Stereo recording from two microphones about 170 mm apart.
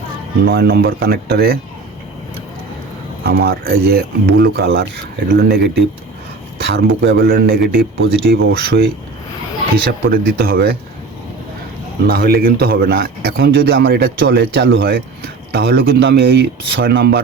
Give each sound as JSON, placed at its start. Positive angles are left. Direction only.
{"t": 0.4, "sound": "a man's voice", "side_deg": -65}
{"t": 3.2, "sound": "a man's voice", "side_deg": -65}
{"t": 10.1, "sound": "a man's voice", "side_deg": -65}
{"t": 12.0, "sound": "a man's voice", "side_deg": -65}